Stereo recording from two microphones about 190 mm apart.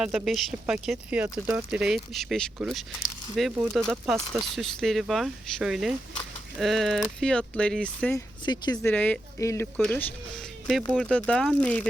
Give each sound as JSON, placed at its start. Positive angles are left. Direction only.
{"t": 0.0, "sound": "speech", "side_deg": 0}
{"t": 8.4, "sound": "speech", "side_deg": 25}
{"t": 8.8, "sound": "speech", "side_deg": 10}